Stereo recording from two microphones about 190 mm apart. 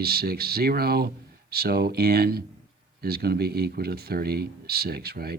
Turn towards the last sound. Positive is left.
turn(degrees=-55)  # may be behind; listen again after turning